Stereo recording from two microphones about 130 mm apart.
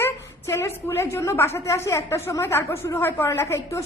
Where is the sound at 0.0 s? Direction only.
20° left (ahead or behind).